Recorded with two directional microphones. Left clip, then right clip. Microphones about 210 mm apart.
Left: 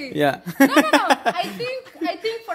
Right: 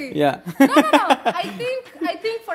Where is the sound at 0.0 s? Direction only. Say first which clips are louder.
Right 1 dB; 5° left (ahead or behind).